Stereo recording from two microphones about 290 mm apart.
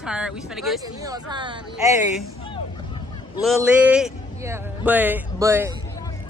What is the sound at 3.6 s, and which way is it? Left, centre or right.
A man's voice, centre.